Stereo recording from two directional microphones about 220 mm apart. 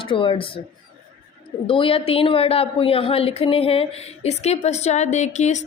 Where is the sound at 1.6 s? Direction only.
25° left (ahead or behind).